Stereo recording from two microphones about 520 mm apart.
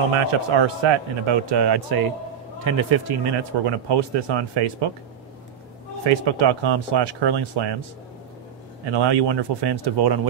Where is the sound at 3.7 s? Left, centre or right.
Right.